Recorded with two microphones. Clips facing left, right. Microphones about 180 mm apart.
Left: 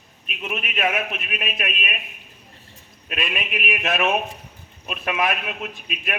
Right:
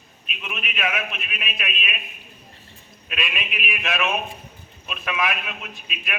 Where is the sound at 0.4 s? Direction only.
45° left (ahead or behind).